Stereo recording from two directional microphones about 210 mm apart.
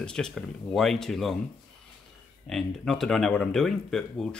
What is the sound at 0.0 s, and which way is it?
Speech, 5° left (ahead or behind).